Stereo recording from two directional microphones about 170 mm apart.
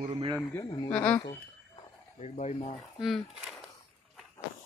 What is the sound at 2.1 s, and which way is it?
Speech, 40° left (ahead or behind).